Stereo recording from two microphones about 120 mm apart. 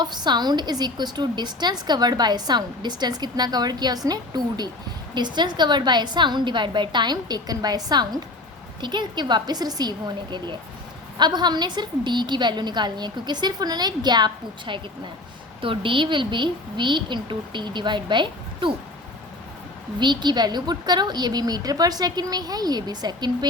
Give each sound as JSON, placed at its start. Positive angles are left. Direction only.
{"t": 0.0, "sound": "a woman's voice", "side_deg": -35}
{"t": 11.2, "sound": "a woman's voice", "side_deg": -35}
{"t": 20.0, "sound": "a woman's voice", "side_deg": -40}